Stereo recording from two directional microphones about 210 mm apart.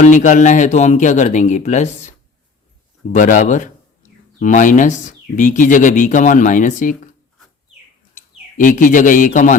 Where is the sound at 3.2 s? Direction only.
40° left (ahead or behind).